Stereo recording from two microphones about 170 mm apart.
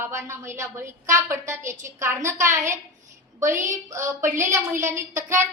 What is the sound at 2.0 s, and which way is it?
Speech, 15° right (ahead or behind).